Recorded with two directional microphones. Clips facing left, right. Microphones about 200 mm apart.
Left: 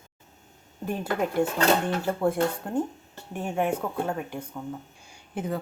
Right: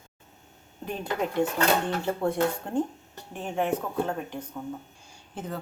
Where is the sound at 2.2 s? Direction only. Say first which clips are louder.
Left 1 dB; 5° left (ahead or behind).